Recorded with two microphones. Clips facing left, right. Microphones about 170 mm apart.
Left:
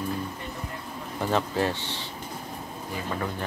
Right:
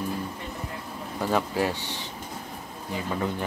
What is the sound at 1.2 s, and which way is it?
Speech, 10° right (ahead or behind).